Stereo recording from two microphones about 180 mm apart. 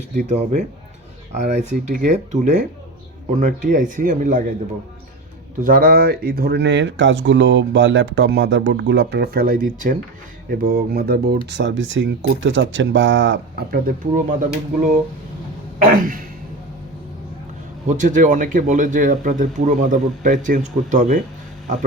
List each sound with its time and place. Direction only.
0.2 s speech: 40° right (ahead or behind)
5.6 s speech: 55° right (ahead or behind)
11.4 s speech: 75° right (ahead or behind); by 14.3 s 45° right (ahead or behind)
15.8 s speech: 50° right (ahead or behind)
17.8 s speech: 45° right (ahead or behind)